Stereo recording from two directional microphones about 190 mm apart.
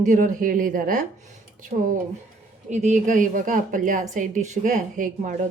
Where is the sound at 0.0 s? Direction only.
40° right (ahead or behind).